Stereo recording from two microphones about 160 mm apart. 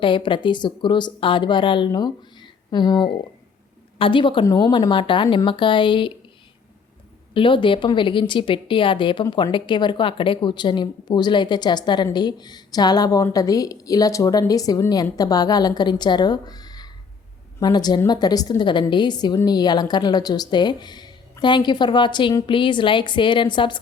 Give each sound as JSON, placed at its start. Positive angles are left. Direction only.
{"t": 0.0, "sound": "a woman's voice", "side_deg": 30}
{"t": 7.3, "sound": "a woman's voice", "side_deg": 30}